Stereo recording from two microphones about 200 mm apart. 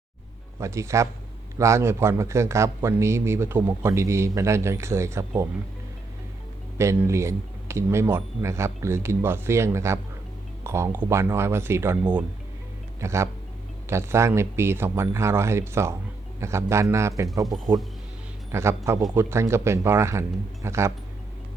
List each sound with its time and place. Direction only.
0.6 s a man's voice: 15° right (ahead or behind)
6.7 s a man's voice: 15° right (ahead or behind)
13.0 s a man's voice: 15° right (ahead or behind)
18.5 s a man's voice: 15° right (ahead or behind)